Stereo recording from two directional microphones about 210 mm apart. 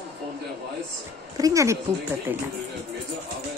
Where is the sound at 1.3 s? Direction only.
15° right (ahead or behind).